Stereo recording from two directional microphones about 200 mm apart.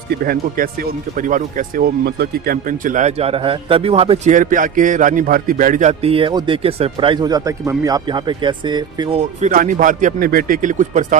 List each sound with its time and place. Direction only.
0.1 s speech: 50° right (ahead or behind)